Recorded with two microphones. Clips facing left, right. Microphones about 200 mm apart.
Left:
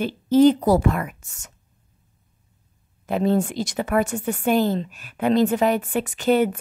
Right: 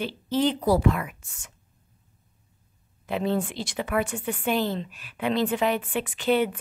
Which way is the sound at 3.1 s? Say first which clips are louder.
Left 5 dB; 45° left (ahead or behind).